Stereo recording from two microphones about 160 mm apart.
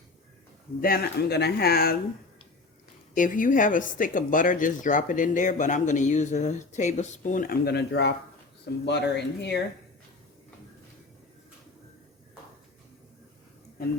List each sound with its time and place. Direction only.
0.8 s speech: 65° left (ahead or behind)
3.2 s speech: 55° left (ahead or behind); by 9.6 s 90° left